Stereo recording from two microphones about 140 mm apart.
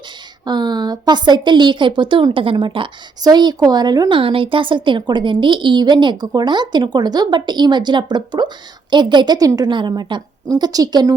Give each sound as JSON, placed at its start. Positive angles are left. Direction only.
{"t": 0.4, "sound": "a woman's voice", "side_deg": -30}
{"t": 4.2, "sound": "a woman's voice", "side_deg": -40}